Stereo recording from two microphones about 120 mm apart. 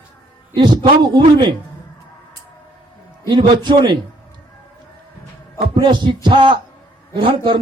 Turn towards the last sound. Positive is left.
turn(degrees=-45)  # may be behind; listen again after turning